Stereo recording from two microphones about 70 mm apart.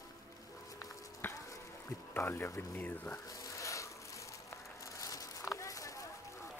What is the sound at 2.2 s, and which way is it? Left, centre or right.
Speech, left.